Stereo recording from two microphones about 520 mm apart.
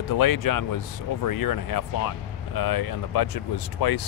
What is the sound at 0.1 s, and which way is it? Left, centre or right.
Speech, left.